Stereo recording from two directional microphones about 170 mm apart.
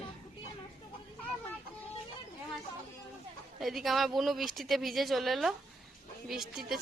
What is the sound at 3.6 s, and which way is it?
Speech, centre (ahead or behind).